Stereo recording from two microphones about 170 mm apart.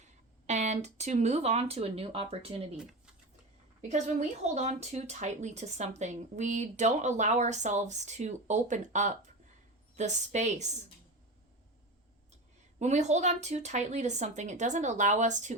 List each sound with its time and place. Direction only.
0.0 s speech: 45° right (ahead or behind)
3.8 s speech: 45° right (ahead or behind)
12.8 s speech: 40° right (ahead or behind)